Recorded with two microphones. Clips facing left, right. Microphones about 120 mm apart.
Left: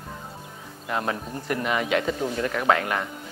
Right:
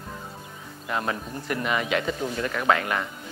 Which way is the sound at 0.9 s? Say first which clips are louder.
Left 1 dB; 35° left (ahead or behind).